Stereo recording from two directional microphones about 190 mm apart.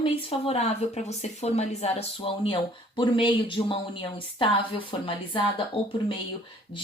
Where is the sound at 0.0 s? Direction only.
30° left (ahead or behind).